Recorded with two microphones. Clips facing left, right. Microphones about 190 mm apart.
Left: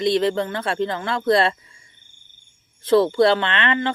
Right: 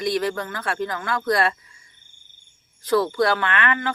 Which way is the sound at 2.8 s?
25° left (ahead or behind).